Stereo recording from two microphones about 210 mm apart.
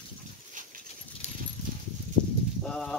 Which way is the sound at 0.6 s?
40° right (ahead or behind).